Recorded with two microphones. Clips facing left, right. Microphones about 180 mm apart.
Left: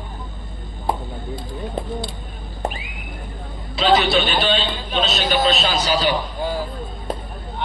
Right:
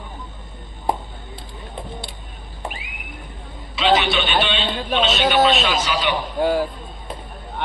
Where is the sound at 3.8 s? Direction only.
35° left (ahead or behind).